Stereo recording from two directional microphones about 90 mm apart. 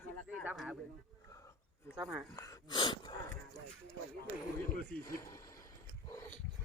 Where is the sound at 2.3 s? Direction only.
35° left (ahead or behind).